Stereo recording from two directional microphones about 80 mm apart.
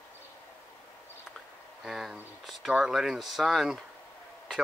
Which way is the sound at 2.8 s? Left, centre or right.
Centre.